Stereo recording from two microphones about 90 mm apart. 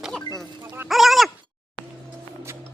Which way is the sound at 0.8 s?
Centre (ahead or behind).